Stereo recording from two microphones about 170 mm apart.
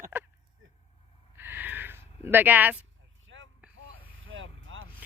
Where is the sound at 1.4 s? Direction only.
10° right (ahead or behind).